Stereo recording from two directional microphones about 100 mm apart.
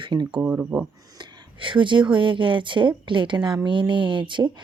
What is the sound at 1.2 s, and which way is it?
Speech, 55° right (ahead or behind).